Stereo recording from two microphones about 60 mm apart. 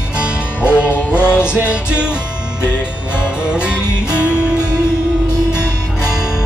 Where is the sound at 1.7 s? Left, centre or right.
Centre.